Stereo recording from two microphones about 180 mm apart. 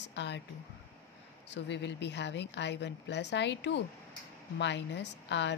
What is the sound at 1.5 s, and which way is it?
Speech, 80° left.